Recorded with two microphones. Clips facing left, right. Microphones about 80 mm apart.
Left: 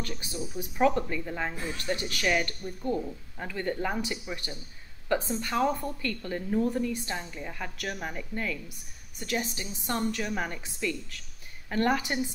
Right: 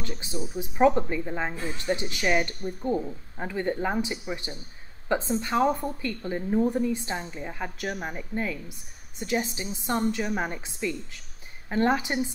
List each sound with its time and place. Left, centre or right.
0.0 s a woman's voice: right